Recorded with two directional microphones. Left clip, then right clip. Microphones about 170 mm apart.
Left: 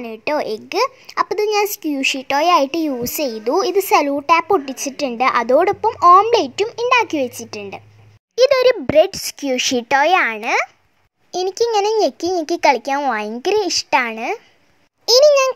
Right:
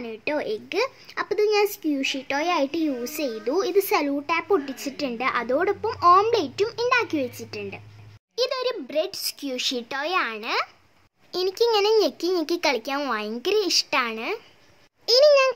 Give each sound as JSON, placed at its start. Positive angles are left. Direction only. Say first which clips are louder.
{"t": 0.0, "sound": "a child's voice", "louder": "left 7 dB", "side_deg": 35}
{"t": 8.4, "sound": "a child's voice", "louder": "left 13 dB", "side_deg": 45}